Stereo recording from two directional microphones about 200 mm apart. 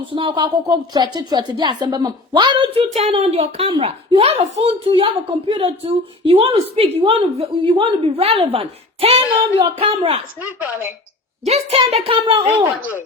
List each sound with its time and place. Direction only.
0.1 s a woman's voice: 25° right (ahead or behind)
11.4 s a woman's voice: 30° right (ahead or behind)
12.5 s speech: 10° right (ahead or behind)